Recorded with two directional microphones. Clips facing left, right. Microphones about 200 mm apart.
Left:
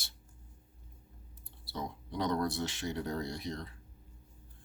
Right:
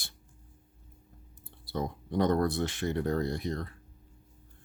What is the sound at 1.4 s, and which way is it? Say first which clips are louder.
Speech: right 6 dB; 50° right (ahead or behind).